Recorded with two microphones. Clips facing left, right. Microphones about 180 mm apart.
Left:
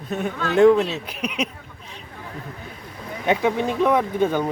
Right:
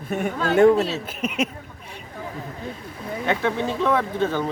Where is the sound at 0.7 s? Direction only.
40° right (ahead or behind).